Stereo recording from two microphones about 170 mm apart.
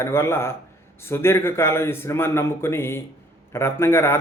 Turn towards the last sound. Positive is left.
turn(degrees=15)  # may be behind; listen again after turning